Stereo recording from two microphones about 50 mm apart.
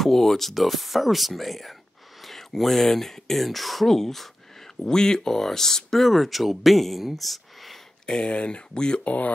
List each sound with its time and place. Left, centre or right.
0.0 s speech: centre
8.1 s speech: centre